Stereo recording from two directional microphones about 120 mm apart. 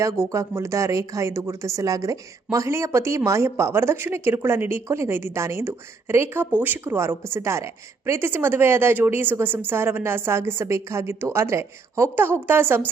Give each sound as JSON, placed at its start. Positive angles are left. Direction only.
{"t": 0.0, "sound": "speech", "side_deg": -25}